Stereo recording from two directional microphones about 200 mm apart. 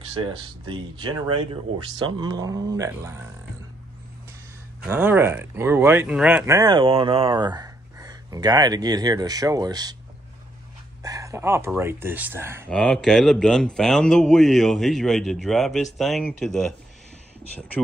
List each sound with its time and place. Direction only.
0.1 s speech: 25° right (ahead or behind)
4.8 s speech: 10° right (ahead or behind)
11.0 s speech: 15° right (ahead or behind)
12.6 s speech: 5° left (ahead or behind)